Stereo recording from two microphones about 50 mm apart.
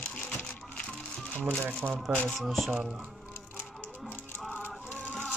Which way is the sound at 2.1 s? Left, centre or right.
Right.